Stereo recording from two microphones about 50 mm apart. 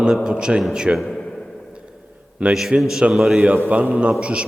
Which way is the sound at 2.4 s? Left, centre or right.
Right.